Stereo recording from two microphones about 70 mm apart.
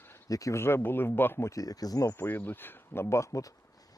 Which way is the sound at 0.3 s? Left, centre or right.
Left.